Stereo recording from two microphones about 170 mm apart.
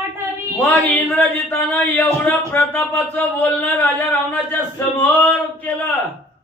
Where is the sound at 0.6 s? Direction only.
10° left (ahead or behind).